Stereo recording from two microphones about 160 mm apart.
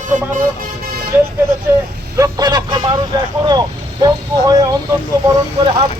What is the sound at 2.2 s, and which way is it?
Speech, 25° right (ahead or behind).